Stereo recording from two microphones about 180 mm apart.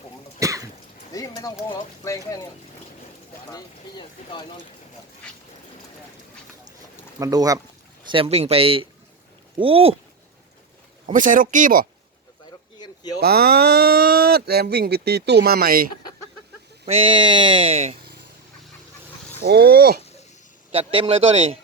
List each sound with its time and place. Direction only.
0.3 s cough: 15° right (ahead or behind)
1.1 s speech: 20° left (ahead or behind)
3.5 s speech: 25° left (ahead or behind)
7.2 s speech: 20° right (ahead or behind)
8.1 s a man's voice: 30° right (ahead or behind)
11.0 s speech: 45° right (ahead or behind)
12.8 s a sound: 25° left (ahead or behind)
13.1 s speech: 60° right (ahead or behind)
16.8 s speech: 30° right (ahead or behind)
19.4 s speech: 65° right (ahead or behind)
20.7 s a man's voice: 30° right (ahead or behind)